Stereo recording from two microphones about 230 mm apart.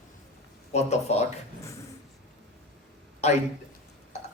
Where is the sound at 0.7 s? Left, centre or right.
Left.